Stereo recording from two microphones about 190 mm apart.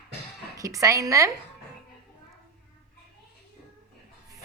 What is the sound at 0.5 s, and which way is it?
Speech, 15° right (ahead or behind).